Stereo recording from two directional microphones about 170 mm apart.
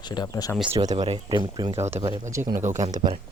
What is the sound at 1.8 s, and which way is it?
Speech, 15° right (ahead or behind).